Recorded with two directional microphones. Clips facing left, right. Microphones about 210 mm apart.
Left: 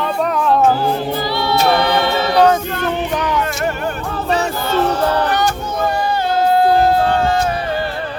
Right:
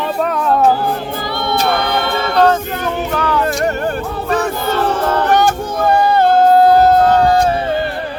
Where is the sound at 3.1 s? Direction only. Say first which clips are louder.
Right 2 dB; 15° left (ahead or behind).